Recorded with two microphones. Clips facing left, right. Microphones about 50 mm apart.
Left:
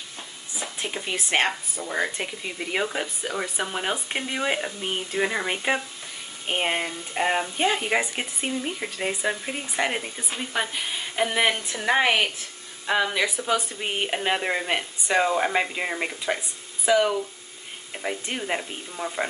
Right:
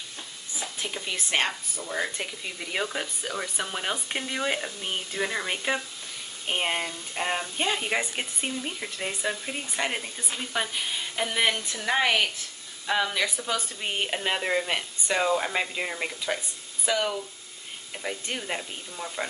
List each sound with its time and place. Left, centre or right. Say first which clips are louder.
0.7 s speech: left 3 dB; left